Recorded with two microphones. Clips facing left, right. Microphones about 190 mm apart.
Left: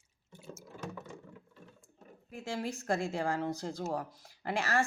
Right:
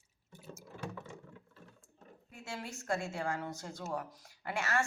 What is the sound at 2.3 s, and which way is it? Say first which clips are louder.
Speech: left 7 dB; 35° left (ahead or behind).